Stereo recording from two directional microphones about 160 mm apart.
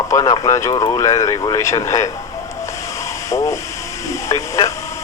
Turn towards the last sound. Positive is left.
turn(degrees=20)  # may be behind; listen again after turning